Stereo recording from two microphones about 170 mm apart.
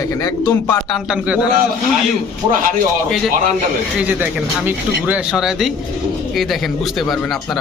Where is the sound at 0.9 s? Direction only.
5° right (ahead or behind).